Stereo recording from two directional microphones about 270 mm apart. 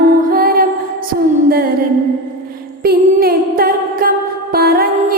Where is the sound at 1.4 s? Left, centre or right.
Right.